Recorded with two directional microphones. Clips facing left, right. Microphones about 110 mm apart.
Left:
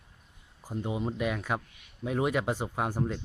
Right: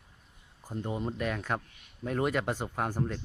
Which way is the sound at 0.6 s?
10° left (ahead or behind).